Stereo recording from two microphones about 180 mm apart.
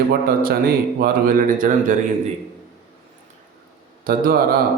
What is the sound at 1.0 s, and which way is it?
Speech, 50° right (ahead or behind).